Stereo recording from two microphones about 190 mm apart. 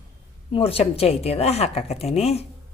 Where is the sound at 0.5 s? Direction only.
30° left (ahead or behind).